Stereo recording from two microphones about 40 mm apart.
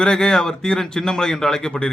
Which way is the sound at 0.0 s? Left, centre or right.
Centre.